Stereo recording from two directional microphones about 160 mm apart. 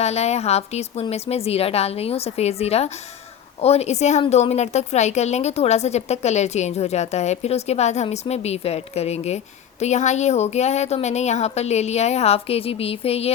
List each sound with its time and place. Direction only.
0.0 s a woman's voice: 40° left (ahead or behind)